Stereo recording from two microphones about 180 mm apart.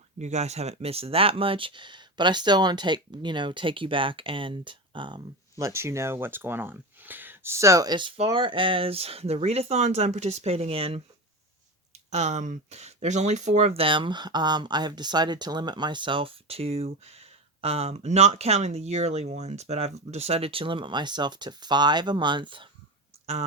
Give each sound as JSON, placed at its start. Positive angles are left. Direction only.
{"t": 0.2, "sound": "speech", "side_deg": -40}
{"t": 12.1, "sound": "speech", "side_deg": -40}